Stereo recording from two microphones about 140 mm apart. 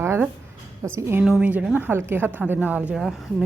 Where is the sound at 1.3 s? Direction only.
5° right (ahead or behind).